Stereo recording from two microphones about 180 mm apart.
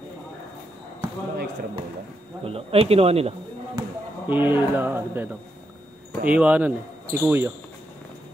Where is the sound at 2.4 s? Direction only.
30° right (ahead or behind).